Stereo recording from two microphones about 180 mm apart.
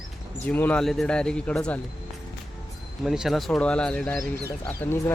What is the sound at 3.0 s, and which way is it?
Speech, centre (ahead or behind).